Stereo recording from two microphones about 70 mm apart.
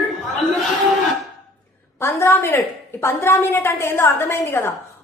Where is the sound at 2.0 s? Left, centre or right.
Left.